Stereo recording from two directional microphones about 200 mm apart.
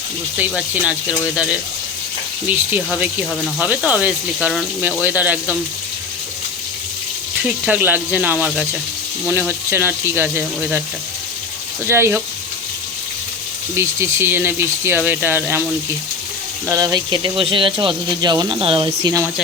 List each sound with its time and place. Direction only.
0.3 s speech: 5° right (ahead or behind)
2.5 s speech: 10° right (ahead or behind)
7.4 s speech: 5° right (ahead or behind)
11.9 s speech: 10° right (ahead or behind)
13.7 s speech: 15° right (ahead or behind)
16.6 s speech: 15° right (ahead or behind)